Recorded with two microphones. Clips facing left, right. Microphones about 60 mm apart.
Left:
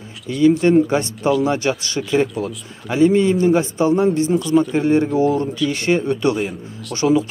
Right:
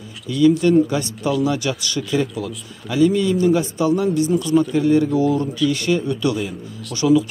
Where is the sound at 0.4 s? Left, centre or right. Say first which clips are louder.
Left 1 dB; left.